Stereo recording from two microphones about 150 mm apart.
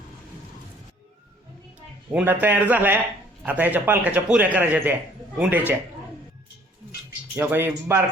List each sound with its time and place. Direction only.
2.1 s a man's voice: 10° right (ahead or behind)
7.3 s a man's voice: 15° right (ahead or behind)